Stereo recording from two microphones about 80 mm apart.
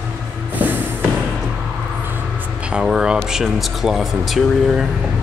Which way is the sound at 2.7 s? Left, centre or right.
Centre.